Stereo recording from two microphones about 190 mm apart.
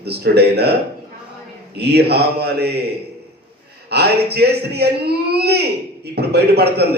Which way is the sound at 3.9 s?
60° right (ahead or behind).